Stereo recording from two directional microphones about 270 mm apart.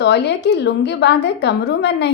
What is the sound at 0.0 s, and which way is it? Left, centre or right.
A woman's voice, left.